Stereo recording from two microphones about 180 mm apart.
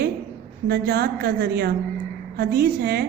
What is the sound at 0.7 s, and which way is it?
Mantra, 60° right (ahead or behind).